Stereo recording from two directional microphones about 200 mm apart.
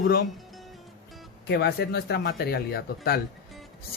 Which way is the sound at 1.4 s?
55° left (ahead or behind).